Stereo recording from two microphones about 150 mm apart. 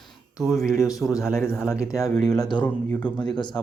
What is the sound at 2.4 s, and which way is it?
Speech, 30° left (ahead or behind).